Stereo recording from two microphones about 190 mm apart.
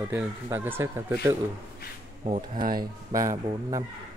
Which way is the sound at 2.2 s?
35° right (ahead or behind).